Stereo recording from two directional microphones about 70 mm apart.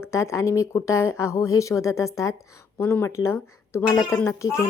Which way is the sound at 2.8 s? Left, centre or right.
Left.